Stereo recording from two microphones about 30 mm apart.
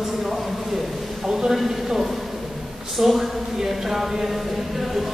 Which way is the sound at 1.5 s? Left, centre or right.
Centre.